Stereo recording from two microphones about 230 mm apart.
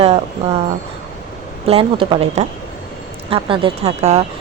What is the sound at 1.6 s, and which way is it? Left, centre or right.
A woman's voice, right.